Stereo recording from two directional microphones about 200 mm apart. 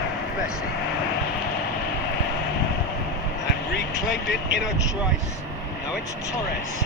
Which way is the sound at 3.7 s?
60° left (ahead or behind).